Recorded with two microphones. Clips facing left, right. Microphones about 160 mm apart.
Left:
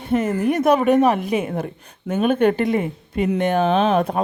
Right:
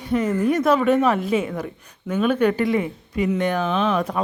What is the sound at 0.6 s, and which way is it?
A woman's voice, 20° left (ahead or behind).